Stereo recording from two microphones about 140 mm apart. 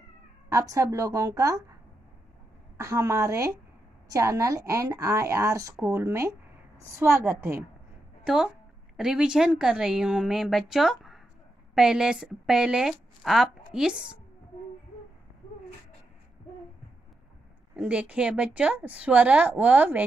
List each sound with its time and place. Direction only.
0.5 s a woman's voice: 20° right (ahead or behind)
2.8 s a woman's voice: 20° right (ahead or behind)
8.9 s a woman's voice: 5° right (ahead or behind)
17.7 s a woman's voice: 10° right (ahead or behind)